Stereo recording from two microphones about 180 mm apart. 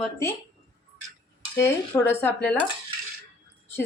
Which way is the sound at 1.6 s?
10° left (ahead or behind).